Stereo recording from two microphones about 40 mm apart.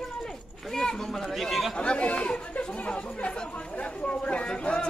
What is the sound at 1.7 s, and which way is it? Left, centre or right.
Speech, left.